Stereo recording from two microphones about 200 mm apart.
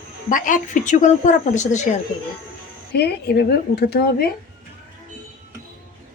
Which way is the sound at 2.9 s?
55° left (ahead or behind).